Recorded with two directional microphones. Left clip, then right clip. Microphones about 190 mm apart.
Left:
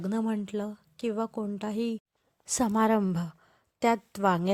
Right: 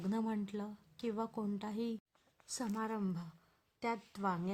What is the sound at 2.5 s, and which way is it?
A woman's voice, 45° left (ahead or behind).